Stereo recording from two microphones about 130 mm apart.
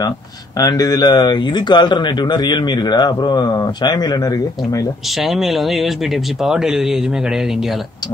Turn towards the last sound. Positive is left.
turn(degrees=0)  # may be behind; listen again after turning